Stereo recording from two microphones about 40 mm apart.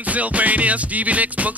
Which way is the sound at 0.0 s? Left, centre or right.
Right.